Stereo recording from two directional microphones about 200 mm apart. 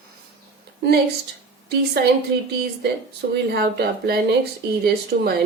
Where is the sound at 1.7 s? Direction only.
55° right (ahead or behind).